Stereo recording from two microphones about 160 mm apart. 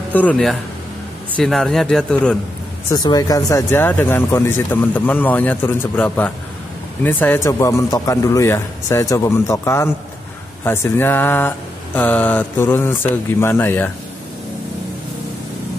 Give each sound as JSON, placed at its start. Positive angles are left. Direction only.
{"t": 0.1, "sound": "a man's voice", "side_deg": 10}
{"t": 2.9, "sound": "speech", "side_deg": 25}